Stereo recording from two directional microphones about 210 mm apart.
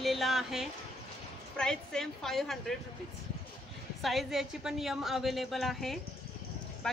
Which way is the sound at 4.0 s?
Centre (ahead or behind).